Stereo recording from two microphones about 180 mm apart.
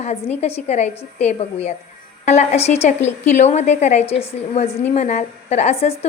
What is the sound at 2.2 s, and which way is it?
A woman's voice, 40° left (ahead or behind).